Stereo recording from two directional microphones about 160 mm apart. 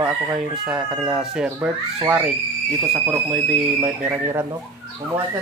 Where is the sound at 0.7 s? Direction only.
5° right (ahead or behind).